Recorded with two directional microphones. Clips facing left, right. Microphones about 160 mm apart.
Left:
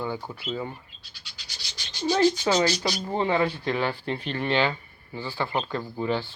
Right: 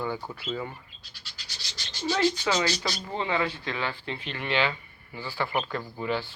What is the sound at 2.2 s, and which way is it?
Speech, 15° left (ahead or behind).